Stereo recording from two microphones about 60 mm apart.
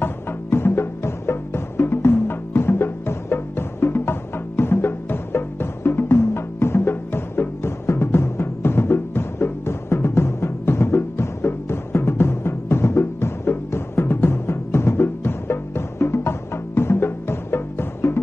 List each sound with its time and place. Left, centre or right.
0.0 s music: left